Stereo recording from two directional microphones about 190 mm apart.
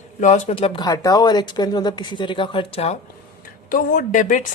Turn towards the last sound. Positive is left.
turn(degrees=45)  # may be behind; listen again after turning